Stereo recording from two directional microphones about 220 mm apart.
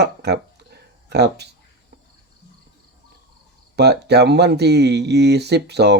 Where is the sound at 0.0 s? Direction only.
50° right (ahead or behind).